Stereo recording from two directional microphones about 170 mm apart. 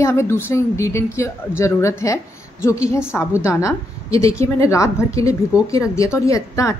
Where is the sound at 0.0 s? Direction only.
15° left (ahead or behind).